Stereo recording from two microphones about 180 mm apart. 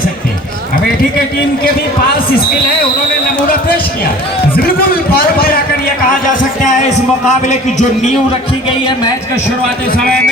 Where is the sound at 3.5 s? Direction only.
55° left (ahead or behind).